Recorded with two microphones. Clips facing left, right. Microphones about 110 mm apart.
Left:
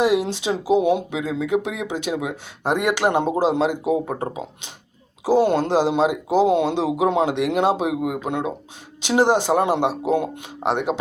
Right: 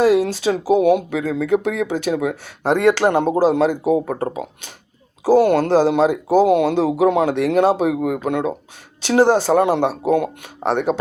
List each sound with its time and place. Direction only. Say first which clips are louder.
0.0 s speech: right 4 dB; 20° left (ahead or behind)